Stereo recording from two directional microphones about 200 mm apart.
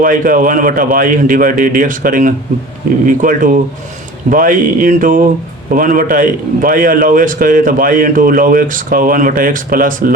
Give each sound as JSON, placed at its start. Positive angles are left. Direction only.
{"t": 0.0, "sound": "a man's voice", "side_deg": -45}